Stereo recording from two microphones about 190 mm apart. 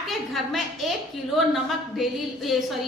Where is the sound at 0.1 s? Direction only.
Centre (ahead or behind).